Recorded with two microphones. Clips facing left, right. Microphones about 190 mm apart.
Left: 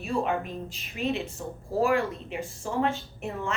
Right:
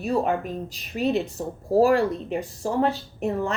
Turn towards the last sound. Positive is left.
turn(degrees=-35)  # may be behind; listen again after turning